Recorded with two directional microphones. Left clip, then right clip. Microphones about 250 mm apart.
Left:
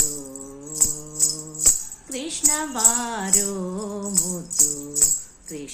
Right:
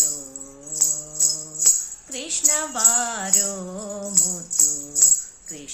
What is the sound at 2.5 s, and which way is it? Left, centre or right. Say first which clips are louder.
Music: right 1 dB; centre.